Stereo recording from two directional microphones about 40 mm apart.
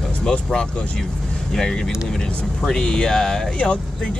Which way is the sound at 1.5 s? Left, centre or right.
Centre.